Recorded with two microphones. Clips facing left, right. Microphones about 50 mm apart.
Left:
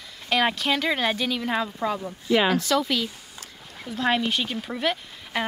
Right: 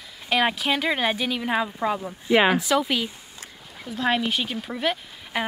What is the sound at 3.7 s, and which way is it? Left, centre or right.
Speech, centre.